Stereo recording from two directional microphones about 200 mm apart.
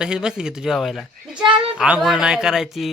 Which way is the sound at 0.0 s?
5° right (ahead or behind).